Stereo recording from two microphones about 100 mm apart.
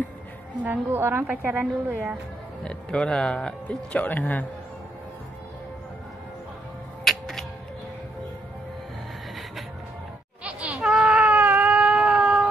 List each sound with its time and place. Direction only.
0.7 s a woman's voice: 20° right (ahead or behind)
2.6 s speech: 10° left (ahead or behind)
7.1 s music: 5° left (ahead or behind)
10.4 s baby cry: 10° right (ahead or behind)